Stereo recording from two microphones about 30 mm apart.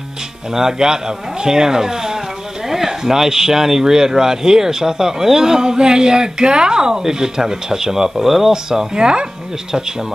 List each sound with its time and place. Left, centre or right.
0.6 s speech: right
8.9 s speech: right